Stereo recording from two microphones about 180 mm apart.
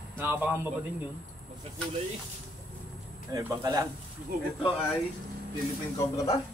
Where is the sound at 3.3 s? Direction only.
20° right (ahead or behind).